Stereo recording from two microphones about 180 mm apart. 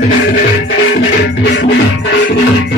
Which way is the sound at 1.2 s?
80° left.